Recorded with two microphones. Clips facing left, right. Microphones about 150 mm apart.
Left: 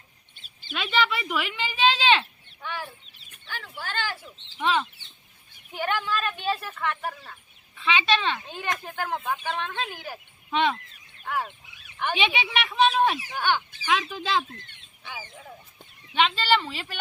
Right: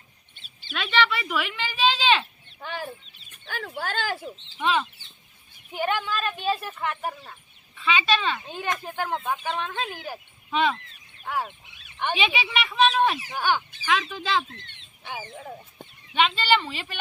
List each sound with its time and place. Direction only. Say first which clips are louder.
0.6 s speech: right 1 dB; 10° left (ahead or behind)
3.4 s speech: right 5 dB; 50° right (ahead or behind)
4.5 s a woman's voice: even; 5° right (ahead or behind)
5.8 s speech: right 1 dB; 30° right (ahead or behind)
6.6 s speech: even; 20° right (ahead or behind)
7.9 s speech: even; 5° right (ahead or behind)
15.2 s speech: right 5 dB; 40° right (ahead or behind)
16.1 s a woman's voice: right 1 dB; 10° right (ahead or behind)